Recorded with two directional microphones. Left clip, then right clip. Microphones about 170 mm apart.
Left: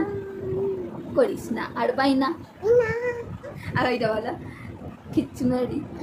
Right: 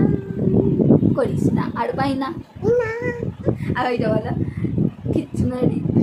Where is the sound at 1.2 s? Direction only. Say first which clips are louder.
Right 2 dB; 5° left (ahead or behind).